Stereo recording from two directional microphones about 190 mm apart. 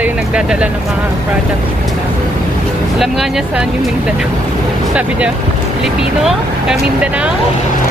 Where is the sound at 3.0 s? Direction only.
Centre (ahead or behind).